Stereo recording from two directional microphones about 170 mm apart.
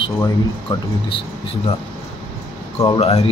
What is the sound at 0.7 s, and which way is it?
Speech, 20° left (ahead or behind).